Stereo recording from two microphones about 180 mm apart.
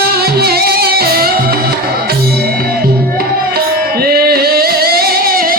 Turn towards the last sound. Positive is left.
turn(degrees=-55)  # may be behind; listen again after turning